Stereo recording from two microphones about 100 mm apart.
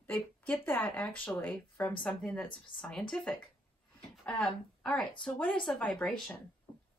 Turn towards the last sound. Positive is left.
turn(degrees=5)  # may be behind; listen again after turning